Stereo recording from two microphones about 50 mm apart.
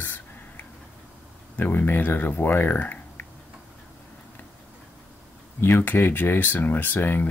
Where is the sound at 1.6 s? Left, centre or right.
Left.